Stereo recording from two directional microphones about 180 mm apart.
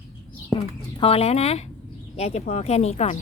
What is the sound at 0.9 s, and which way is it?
Speech, 35° left (ahead or behind).